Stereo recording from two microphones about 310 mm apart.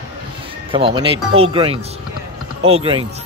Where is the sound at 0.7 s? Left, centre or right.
Centre.